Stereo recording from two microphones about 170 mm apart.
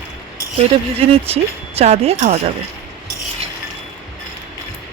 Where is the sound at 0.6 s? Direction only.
35° right (ahead or behind).